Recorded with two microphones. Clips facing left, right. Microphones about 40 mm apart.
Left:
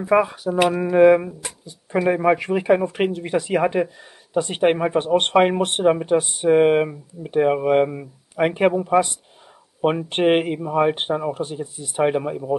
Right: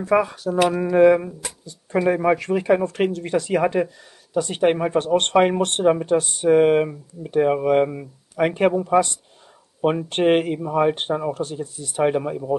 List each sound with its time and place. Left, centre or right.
0.0 s speech: centre